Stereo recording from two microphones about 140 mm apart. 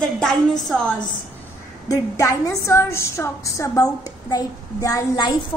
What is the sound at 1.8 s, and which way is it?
A woman's voice, 25° left (ahead or behind).